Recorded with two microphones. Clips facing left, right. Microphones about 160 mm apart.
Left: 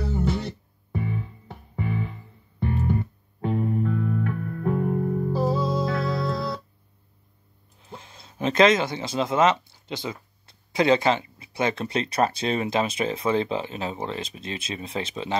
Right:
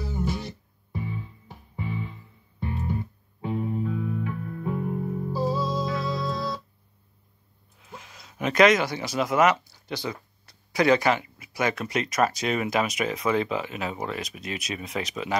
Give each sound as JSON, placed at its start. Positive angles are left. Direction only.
{"t": 0.2, "sound": "music", "side_deg": 65}
{"t": 3.8, "sound": "music", "side_deg": -10}
{"t": 4.2, "sound": "music", "side_deg": 60}
{"t": 7.8, "sound": "speech", "side_deg": 30}